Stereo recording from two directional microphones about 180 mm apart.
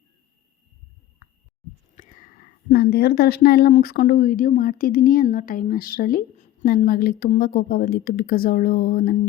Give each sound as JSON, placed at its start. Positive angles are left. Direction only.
{"t": 2.0, "sound": "a woman's voice", "side_deg": 50}